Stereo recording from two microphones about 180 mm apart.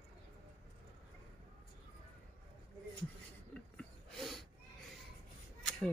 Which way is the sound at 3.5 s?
5° left (ahead or behind).